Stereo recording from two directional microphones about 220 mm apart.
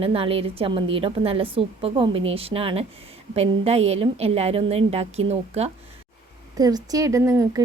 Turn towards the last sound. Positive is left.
turn(degrees=-15)  # may be behind; listen again after turning